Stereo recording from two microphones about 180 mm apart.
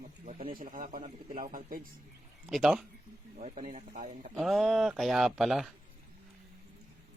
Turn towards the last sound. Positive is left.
turn(degrees=0)  # may be behind; listen again after turning